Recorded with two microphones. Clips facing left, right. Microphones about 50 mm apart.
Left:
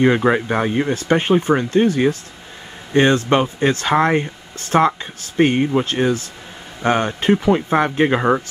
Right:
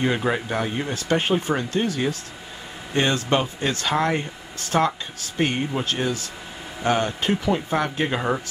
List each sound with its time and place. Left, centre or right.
0.0 s speech: left